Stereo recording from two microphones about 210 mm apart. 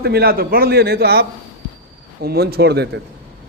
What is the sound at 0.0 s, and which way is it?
A man's voice, 50° right (ahead or behind).